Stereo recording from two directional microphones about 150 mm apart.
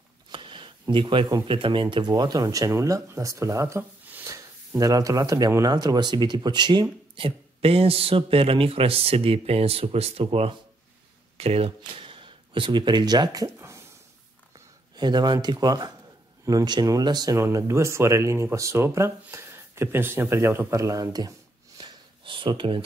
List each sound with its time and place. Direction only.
0.3 s speech: 35° right (ahead or behind)
14.5 s speech: 30° right (ahead or behind)